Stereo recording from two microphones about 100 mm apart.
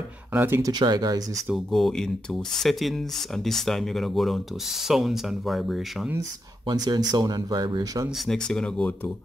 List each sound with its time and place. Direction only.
0.3 s speech: 20° right (ahead or behind)
0.6 s speech: 40° right (ahead or behind)
1.7 s speech: 5° left (ahead or behind)
6.7 s speech: 45° right (ahead or behind)
8.3 s speech: 10° left (ahead or behind)